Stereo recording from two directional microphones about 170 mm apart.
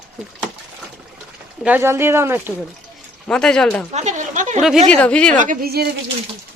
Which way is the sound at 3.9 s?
45° right (ahead or behind).